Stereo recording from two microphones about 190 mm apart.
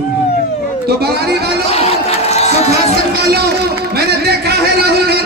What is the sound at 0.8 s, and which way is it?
Speech, 55° right (ahead or behind).